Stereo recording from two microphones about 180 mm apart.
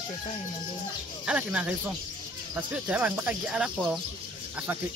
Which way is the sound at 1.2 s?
5° right (ahead or behind).